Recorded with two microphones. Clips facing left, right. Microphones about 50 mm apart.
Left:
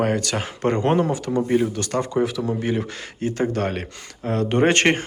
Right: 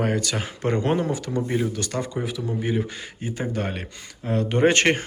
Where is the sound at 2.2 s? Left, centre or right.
Left.